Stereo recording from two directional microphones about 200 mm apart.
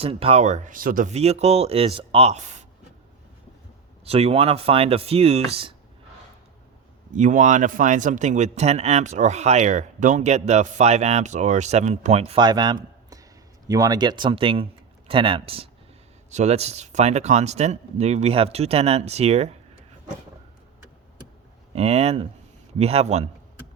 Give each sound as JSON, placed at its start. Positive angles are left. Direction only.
{"t": 0.0, "sound": "speech", "side_deg": -30}
{"t": 4.0, "sound": "speech", "side_deg": -30}
{"t": 7.1, "sound": "speech", "side_deg": -40}
{"t": 21.8, "sound": "speech", "side_deg": -30}